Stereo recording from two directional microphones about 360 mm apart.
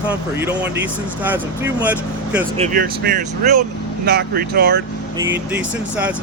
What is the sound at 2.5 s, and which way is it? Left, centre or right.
Speech, right.